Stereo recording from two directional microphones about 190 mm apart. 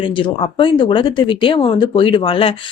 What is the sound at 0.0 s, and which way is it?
Speech, 25° left (ahead or behind).